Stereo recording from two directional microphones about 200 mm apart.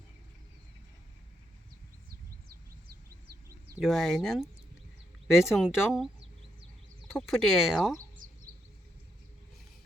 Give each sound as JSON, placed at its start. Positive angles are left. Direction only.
{"t": 2.0, "sound": "bird", "side_deg": -50}
{"t": 3.8, "sound": "speech", "side_deg": 0}
{"t": 7.1, "sound": "speech", "side_deg": 0}
{"t": 8.2, "sound": "a sound", "side_deg": -45}